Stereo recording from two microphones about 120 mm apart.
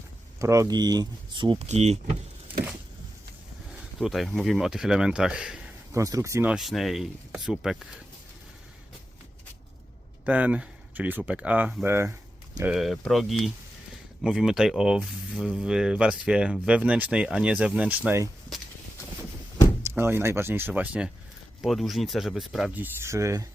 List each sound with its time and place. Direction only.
0.3 s speech: 25° right (ahead or behind); by 1.6 s 40° right (ahead or behind)
1.6 s speech: 65° right (ahead or behind)
4.0 s speech: centre (ahead or behind)
5.9 s speech: 25° right (ahead or behind)
6.5 s speech: centre (ahead or behind)
10.2 s speech: 10° right (ahead or behind)
12.6 s speech: centre (ahead or behind)
19.8 s speech: 20° right (ahead or behind)
21.6 s speech: centre (ahead or behind)
22.7 s speech: 20° right (ahead or behind)